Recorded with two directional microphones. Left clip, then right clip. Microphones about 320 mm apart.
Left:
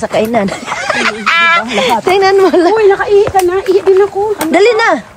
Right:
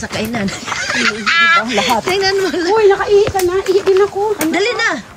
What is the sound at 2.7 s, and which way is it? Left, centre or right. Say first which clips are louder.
Speech: left 3 dB; left.